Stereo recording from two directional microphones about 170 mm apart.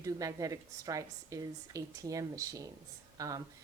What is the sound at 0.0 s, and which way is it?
A woman's voice, 20° right (ahead or behind).